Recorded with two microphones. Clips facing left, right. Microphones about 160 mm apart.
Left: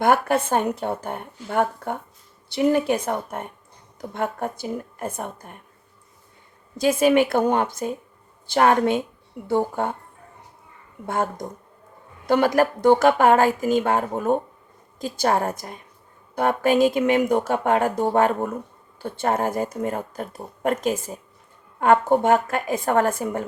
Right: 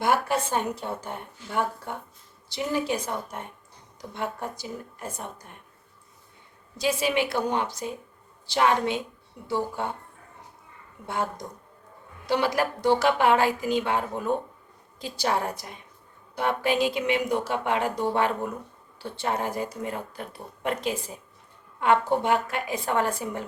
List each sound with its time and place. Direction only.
0.0 s a woman's voice: 50° left (ahead or behind)
6.7 s speech: 50° left (ahead or behind)
11.0 s speech: 50° left (ahead or behind)